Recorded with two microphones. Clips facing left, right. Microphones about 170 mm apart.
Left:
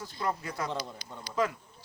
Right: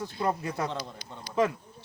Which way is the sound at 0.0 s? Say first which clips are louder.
Right 4 dB; 25° right (ahead or behind).